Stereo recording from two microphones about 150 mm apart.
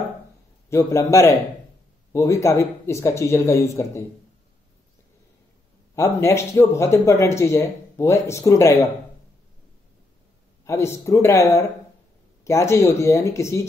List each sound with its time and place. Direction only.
0.7 s speech: 20° left (ahead or behind)
5.9 s speech: 15° left (ahead or behind)
10.6 s speech: 20° left (ahead or behind)